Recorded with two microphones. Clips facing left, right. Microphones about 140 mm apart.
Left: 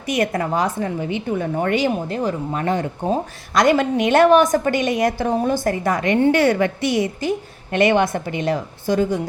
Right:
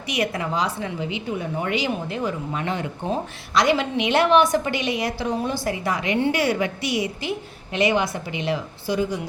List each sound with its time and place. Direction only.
0.1 s a woman's voice: 45° left (ahead or behind)